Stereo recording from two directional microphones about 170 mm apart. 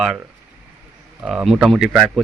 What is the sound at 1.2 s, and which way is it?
Speech, 5° right (ahead or behind).